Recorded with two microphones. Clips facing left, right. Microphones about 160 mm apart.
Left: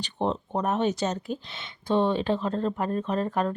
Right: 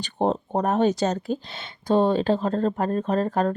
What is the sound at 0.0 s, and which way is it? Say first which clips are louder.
Speech: right 4 dB; 45° right (ahead or behind).